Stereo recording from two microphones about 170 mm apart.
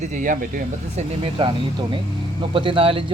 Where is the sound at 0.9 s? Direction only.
30° right (ahead or behind).